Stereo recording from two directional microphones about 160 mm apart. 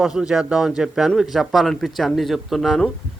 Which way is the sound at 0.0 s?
5° right (ahead or behind).